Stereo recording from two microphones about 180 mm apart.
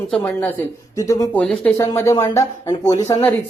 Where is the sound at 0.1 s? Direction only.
10° left (ahead or behind).